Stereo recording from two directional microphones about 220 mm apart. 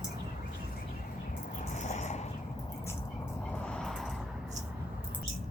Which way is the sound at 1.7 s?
35° left (ahead or behind).